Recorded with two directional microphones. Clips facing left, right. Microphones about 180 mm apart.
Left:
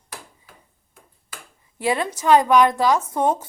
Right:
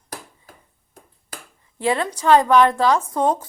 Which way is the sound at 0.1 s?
40° right (ahead or behind).